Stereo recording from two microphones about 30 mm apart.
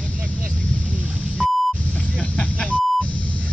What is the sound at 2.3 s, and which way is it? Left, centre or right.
Beep, left.